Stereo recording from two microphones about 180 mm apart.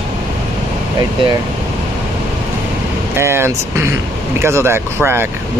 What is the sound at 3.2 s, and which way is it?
Speech, 15° right (ahead or behind).